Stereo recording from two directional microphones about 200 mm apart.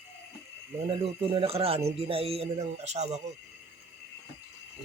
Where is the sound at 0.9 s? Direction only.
30° right (ahead or behind).